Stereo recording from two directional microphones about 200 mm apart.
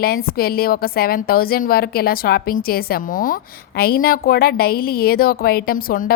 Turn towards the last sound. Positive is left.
turn(degrees=45)  # may be behind; listen again after turning